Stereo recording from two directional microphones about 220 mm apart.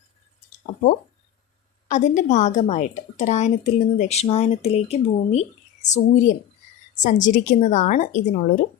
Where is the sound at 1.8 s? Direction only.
35° left (ahead or behind).